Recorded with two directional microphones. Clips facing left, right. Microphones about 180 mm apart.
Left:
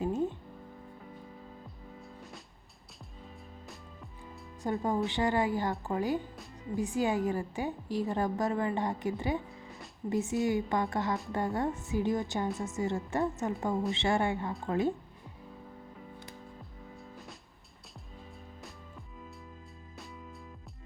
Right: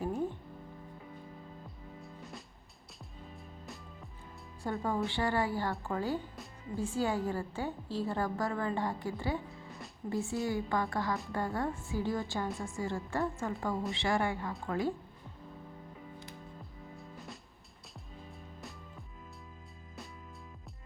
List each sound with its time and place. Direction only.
0.0 s music: 20° left (ahead or behind)
4.6 s a woman's voice: 20° left (ahead or behind)